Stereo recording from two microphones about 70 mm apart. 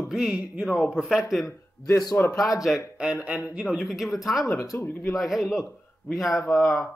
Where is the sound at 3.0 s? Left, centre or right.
Centre.